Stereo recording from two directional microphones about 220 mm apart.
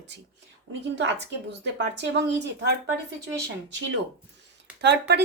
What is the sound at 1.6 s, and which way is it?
Speech, 50° right (ahead or behind).